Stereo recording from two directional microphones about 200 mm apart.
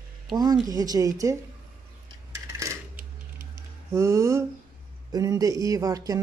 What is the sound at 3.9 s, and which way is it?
Speech, 15° right (ahead or behind).